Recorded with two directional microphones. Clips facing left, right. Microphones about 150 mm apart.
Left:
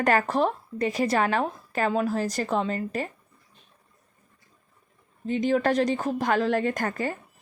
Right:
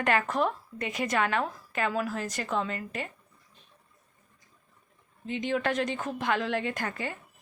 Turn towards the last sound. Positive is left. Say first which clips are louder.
# left 6 dB
turn(degrees=45)  # may be behind; listen again after turning